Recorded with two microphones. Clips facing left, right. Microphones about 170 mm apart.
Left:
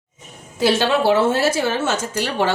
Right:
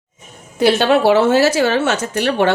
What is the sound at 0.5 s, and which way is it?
A woman's voice, 60° right (ahead or behind).